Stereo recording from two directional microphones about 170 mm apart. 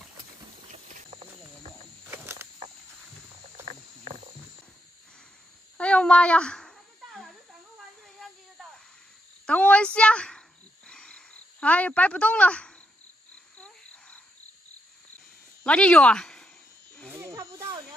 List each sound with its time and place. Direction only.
0.7 s clip-clop: 45° right (ahead or behind)
2.0 s a sound: 15° right (ahead or behind)
3.6 s cricket: 40° right (ahead or behind)
5.8 s a sound: 5° left (ahead or behind)
9.5 s a woman's voice: 5° left (ahead or behind)
10.9 s cricket: 5° left (ahead or behind)
13.6 s a sound: 5° left (ahead or behind)
15.6 s speech: 5° left (ahead or behind)
17.1 s snake: 15° right (ahead or behind)